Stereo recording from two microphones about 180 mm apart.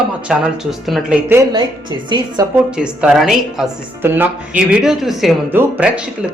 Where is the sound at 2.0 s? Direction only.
25° right (ahead or behind).